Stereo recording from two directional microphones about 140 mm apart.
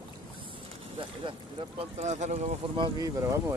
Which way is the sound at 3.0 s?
20° right (ahead or behind).